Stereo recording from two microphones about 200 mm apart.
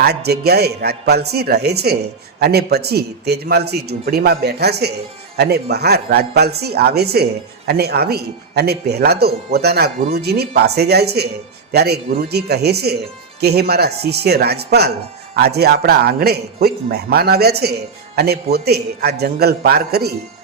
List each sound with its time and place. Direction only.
0.0 s speech: 55° right (ahead or behind)